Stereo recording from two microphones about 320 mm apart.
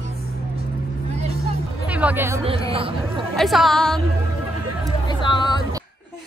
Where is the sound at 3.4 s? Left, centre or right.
Centre.